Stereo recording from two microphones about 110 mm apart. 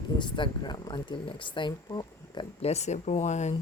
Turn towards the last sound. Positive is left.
turn(degrees=90)